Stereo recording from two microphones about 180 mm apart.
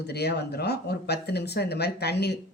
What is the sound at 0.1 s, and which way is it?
Speech, 65° left (ahead or behind).